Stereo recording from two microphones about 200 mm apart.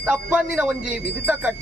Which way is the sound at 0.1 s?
5° right (ahead or behind).